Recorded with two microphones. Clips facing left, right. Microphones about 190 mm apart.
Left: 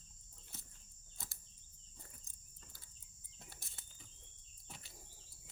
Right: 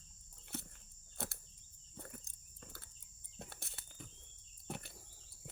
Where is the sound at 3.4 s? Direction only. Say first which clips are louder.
Right 8 dB; 65° right (ahead or behind).